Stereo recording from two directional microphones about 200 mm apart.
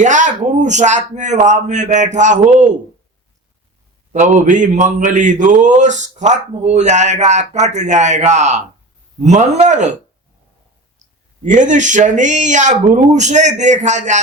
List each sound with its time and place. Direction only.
0.0 s a man's voice: 40° right (ahead or behind)
4.1 s a man's voice: 40° right (ahead or behind)
11.4 s a man's voice: 40° right (ahead or behind)